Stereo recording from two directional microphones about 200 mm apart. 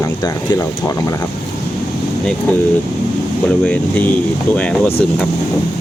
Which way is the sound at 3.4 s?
10° left (ahead or behind).